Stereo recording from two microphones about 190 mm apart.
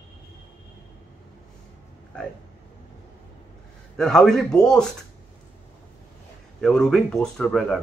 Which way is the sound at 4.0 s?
Centre (ahead or behind).